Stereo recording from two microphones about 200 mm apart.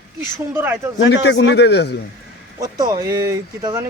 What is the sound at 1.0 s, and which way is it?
Speech, 60° left (ahead or behind).